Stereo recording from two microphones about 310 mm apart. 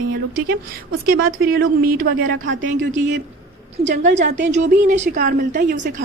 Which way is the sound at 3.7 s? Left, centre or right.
Right.